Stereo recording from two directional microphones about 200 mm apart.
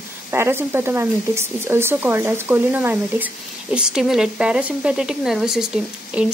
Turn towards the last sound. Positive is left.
turn(degrees=-5)  # may be behind; listen again after turning